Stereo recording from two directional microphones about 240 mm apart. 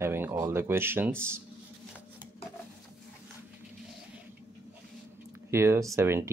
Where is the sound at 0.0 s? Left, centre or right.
Centre.